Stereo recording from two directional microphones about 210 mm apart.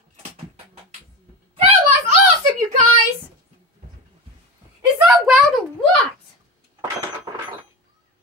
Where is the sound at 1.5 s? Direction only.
25° right (ahead or behind).